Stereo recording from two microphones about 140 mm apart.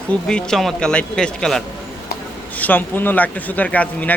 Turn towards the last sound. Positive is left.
turn(degrees=10)  # may be behind; listen again after turning